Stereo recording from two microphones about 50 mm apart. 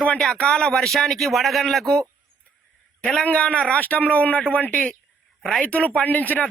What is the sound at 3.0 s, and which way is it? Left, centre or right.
Speech, left.